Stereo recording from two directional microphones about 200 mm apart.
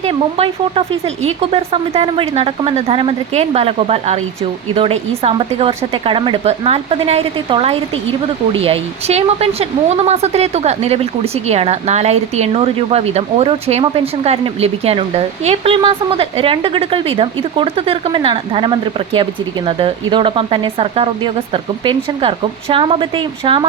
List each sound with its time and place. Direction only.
0.0 s speech: 30° right (ahead or behind)